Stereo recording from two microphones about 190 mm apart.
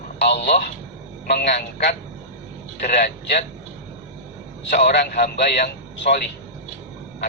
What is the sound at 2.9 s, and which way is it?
Speech, 60° left (ahead or behind).